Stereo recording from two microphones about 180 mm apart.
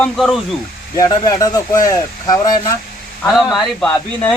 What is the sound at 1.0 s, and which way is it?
Speech, 20° left (ahead or behind).